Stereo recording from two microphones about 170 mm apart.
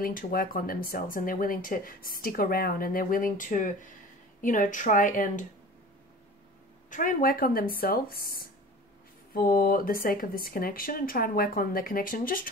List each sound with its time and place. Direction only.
0.0 s a woman's voice: 55° left (ahead or behind)
6.9 s speech: 50° left (ahead or behind)